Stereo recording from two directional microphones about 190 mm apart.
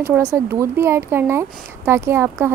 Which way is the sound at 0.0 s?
15° right (ahead or behind).